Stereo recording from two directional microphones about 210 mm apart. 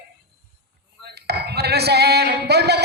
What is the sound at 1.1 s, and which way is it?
Speech, 50° right (ahead or behind).